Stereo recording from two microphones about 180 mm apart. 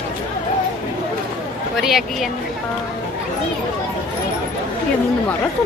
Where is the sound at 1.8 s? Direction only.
Centre (ahead or behind).